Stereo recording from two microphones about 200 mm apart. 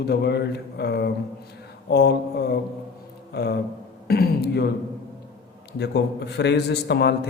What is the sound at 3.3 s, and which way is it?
Music, 55° left (ahead or behind).